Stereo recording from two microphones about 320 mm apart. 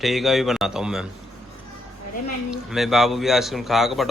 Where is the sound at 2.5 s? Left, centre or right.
Centre.